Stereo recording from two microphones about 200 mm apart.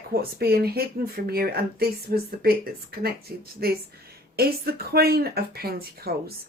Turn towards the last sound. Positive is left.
turn(degrees=-50)  # may be behind; listen again after turning